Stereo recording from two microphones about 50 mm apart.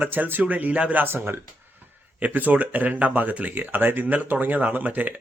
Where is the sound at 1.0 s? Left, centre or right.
Right.